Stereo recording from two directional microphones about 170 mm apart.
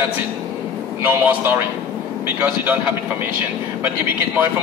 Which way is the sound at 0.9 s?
10° right (ahead or behind).